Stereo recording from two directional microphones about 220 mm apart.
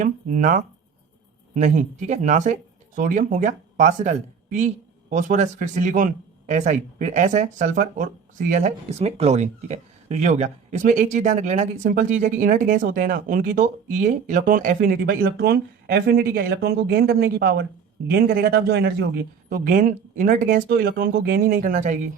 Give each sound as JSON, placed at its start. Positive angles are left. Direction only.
{"t": 0.0, "sound": "a man's voice", "side_deg": -35}